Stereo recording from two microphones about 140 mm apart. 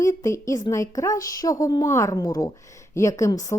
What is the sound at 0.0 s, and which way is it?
A woman's voice, 20° left (ahead or behind).